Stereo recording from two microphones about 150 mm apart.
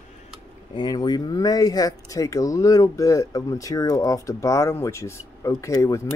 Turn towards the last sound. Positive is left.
turn(degrees=20)  # may be behind; listen again after turning